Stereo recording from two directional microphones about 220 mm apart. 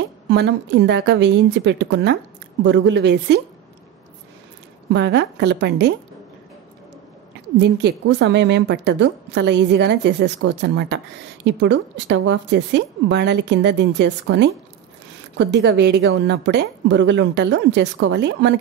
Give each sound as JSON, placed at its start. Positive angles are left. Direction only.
{"t": 0.3, "sound": "a woman's voice", "side_deg": -50}
{"t": 4.9, "sound": "a woman's voice", "side_deg": -50}
{"t": 7.5, "sound": "a woman's voice", "side_deg": -50}